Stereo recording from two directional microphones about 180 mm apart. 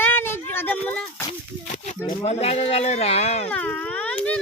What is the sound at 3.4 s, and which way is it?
Speech, 10° left (ahead or behind).